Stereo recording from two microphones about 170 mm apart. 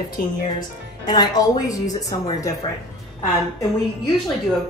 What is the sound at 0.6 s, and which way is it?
Speech, 25° left (ahead or behind).